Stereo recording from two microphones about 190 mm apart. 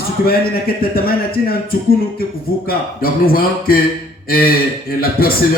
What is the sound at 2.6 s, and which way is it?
A man's voice, 50° left (ahead or behind).